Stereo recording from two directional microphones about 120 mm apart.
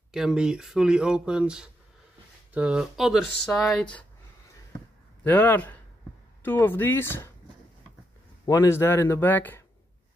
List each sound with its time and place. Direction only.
0.1 s speech: 5° right (ahead or behind)
5.2 s speech: 15° left (ahead or behind)
8.5 s speech: 25° left (ahead or behind)